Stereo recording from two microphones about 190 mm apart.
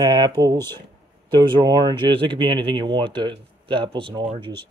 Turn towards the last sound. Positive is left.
turn(degrees=-25)  # may be behind; listen again after turning